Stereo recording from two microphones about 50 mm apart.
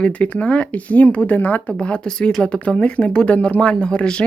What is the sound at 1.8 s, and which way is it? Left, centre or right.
Speech, centre.